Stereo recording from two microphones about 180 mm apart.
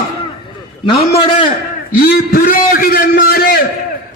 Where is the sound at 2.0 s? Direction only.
50° left (ahead or behind).